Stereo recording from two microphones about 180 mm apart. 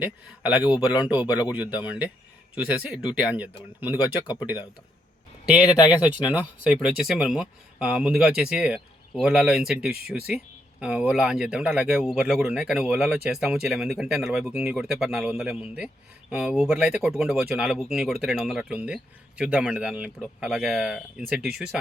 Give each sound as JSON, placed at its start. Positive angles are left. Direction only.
{"t": 0.0, "sound": "speech", "side_deg": -5}
{"t": 0.6, "sound": "speech", "side_deg": 25}
{"t": 2.6, "sound": "speech", "side_deg": -5}
{"t": 3.8, "sound": "speech", "side_deg": 25}
{"t": 6.1, "sound": "speech", "side_deg": -10}